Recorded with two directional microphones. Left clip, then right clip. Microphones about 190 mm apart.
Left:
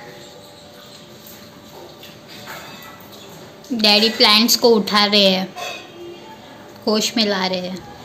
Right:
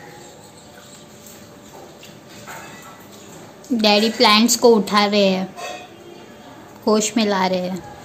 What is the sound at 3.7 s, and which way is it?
A woman's voice, 20° right (ahead or behind).